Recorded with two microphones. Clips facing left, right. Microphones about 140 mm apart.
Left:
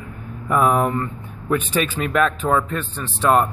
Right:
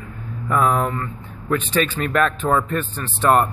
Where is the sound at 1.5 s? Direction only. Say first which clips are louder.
Even; 10° left (ahead or behind).